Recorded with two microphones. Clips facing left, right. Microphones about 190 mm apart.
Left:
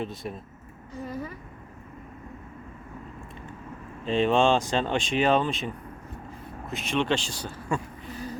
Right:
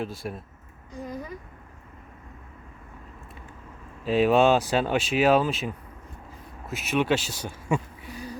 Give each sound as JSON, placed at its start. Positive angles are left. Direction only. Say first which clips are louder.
{"t": 0.0, "sound": "speech", "louder": "right 1 dB", "side_deg": 0}
{"t": 1.0, "sound": "speech", "louder": "left 1 dB", "side_deg": -15}
{"t": 4.0, "sound": "speech", "louder": "right 2 dB", "side_deg": -5}